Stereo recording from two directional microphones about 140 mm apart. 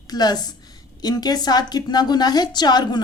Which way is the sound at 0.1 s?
30° left (ahead or behind).